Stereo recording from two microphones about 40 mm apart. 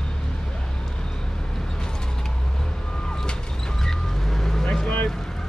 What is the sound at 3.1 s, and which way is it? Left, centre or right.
Vehicle, centre.